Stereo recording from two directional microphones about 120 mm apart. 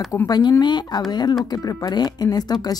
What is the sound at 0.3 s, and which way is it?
A woman's voice, 35° left (ahead or behind).